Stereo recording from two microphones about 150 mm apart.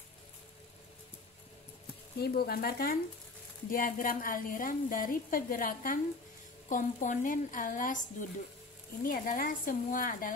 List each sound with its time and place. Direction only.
2.1 s speech: 90° left
3.7 s a woman's voice: 65° left (ahead or behind)